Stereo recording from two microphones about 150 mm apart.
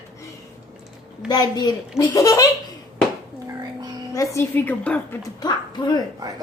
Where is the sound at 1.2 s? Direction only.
25° left (ahead or behind).